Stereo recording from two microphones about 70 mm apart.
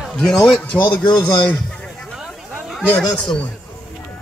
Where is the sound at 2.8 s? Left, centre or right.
Left.